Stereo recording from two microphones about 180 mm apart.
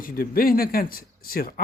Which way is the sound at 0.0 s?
55° left (ahead or behind).